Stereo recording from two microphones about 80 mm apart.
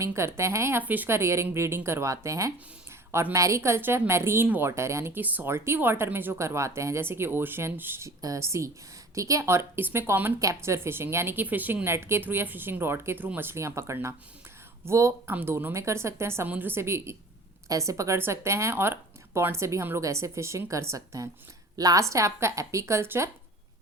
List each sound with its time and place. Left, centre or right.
0.0 s speech: right
0.8 s speech: right
5.2 s a woman's voice: right
8.0 s speech: right
10.4 s a woman's voice: right
15.3 s speech: right
17.7 s a woman's voice: right